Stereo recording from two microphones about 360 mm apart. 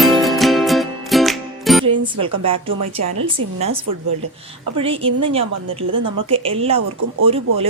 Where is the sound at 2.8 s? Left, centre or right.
Right.